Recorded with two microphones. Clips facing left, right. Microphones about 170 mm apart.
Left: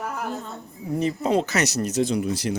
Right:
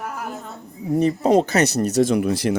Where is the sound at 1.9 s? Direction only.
65° right (ahead or behind).